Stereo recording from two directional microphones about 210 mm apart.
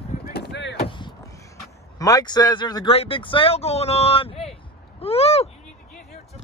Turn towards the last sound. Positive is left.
turn(degrees=30)  # may be behind; listen again after turning